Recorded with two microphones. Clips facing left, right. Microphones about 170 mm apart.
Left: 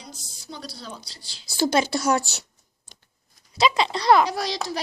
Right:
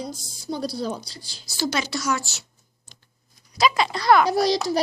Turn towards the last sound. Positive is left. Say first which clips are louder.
# right 8 dB
turn(degrees=-35)  # may be behind; listen again after turning